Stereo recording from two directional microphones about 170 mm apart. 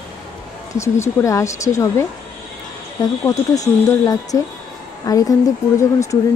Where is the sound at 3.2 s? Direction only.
20° left (ahead or behind).